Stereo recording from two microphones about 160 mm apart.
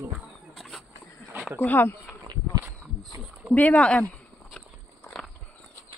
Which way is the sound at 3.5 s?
10° left (ahead or behind).